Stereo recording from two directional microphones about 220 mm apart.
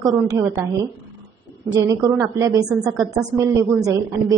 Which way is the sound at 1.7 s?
15° right (ahead or behind).